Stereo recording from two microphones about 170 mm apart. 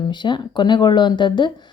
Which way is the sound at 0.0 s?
25° left (ahead or behind).